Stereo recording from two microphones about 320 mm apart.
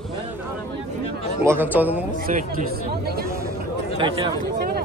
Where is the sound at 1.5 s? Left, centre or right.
Centre.